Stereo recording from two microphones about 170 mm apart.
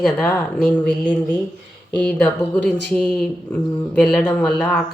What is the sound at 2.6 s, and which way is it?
Speech, 5° left (ahead or behind).